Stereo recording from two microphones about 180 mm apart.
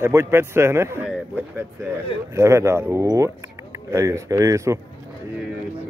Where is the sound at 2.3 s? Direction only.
15° right (ahead or behind).